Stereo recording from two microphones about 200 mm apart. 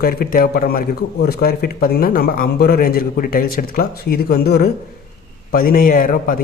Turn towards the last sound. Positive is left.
turn(degrees=45)  # may be behind; listen again after turning